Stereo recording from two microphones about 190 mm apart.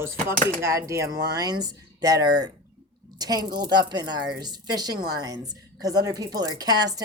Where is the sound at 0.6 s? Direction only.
15° right (ahead or behind).